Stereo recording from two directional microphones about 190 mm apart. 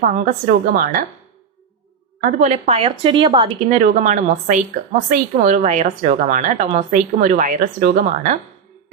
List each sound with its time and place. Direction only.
0.1 s a woman's voice: 45° right (ahead or behind)
2.4 s a woman's voice: 35° right (ahead or behind)
3.7 s a woman's voice: 45° right (ahead or behind)